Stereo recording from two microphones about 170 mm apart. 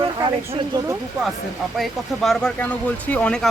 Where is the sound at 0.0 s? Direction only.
30° right (ahead or behind).